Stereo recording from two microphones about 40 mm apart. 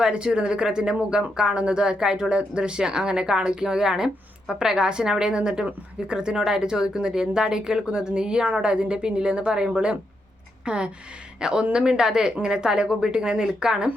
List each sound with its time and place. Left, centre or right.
0.1 s speech: right